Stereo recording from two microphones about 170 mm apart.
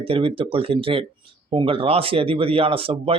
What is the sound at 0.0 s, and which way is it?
Speech, 35° right (ahead or behind).